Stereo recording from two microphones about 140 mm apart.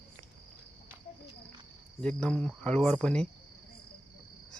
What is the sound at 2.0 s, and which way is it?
Cricket, 10° left (ahead or behind).